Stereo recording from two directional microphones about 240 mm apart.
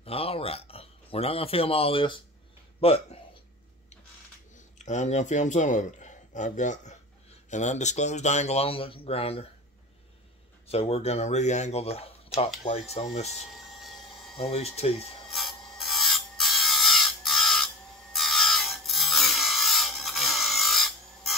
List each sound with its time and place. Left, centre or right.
0.0 s speech: left
4.6 s speech: left
10.7 s speech: left
13.6 s a sound: centre
14.4 s speech: left
15.3 s rub: centre